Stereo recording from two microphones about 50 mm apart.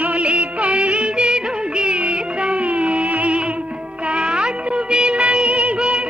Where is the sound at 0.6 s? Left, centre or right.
Right.